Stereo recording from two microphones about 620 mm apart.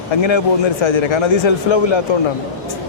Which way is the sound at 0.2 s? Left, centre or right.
Left.